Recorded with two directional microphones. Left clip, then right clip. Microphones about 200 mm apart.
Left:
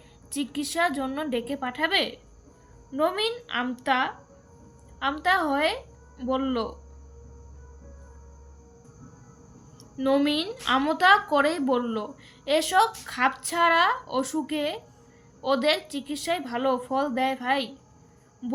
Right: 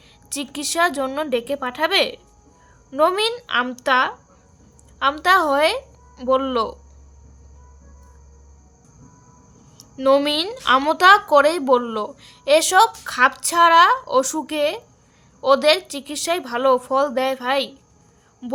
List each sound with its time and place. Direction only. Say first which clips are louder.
0.3 s a woman's voice: right 4 dB; 40° right (ahead or behind)
9.7 s a woman's voice: right 8 dB; 40° right (ahead or behind)